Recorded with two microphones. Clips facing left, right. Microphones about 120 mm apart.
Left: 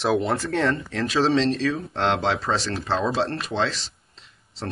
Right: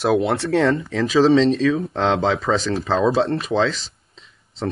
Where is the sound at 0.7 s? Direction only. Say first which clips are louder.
Right 6 dB; centre (ahead or behind).